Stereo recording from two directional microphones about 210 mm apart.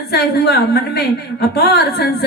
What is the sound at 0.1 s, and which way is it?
A woman's voice, 50° left (ahead or behind).